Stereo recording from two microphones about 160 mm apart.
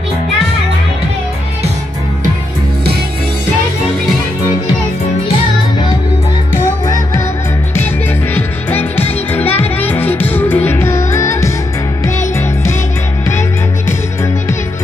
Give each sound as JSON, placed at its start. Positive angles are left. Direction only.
{"t": 8.4, "sound": "music", "side_deg": 10}